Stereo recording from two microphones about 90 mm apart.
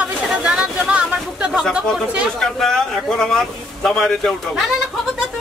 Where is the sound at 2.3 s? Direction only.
5° left (ahead or behind).